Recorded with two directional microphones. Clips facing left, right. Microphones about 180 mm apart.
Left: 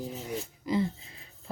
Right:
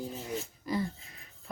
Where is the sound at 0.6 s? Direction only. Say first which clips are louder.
Left 5 dB; 20° left (ahead or behind).